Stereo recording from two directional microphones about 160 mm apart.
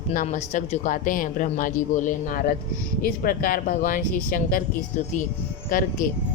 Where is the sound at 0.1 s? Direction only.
50° left (ahead or behind).